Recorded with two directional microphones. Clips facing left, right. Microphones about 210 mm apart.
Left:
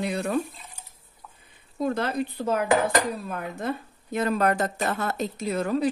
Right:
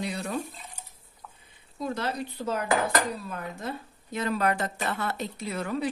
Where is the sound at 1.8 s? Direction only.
55° left (ahead or behind).